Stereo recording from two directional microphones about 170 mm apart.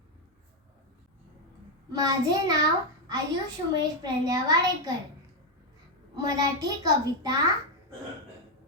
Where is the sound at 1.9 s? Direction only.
25° right (ahead or behind).